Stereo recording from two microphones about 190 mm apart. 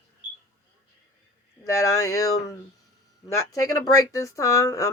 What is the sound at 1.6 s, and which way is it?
Speech, 15° left (ahead or behind).